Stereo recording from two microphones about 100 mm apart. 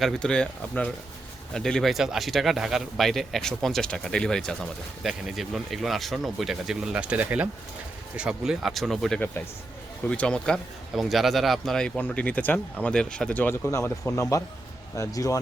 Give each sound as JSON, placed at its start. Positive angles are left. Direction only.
{"t": 0.0, "sound": "speech", "side_deg": 10}
{"t": 13.7, "sound": "speech", "side_deg": 30}